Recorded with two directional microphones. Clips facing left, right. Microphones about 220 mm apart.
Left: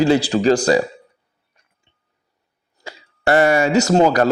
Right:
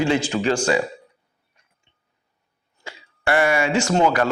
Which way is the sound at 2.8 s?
40° left (ahead or behind).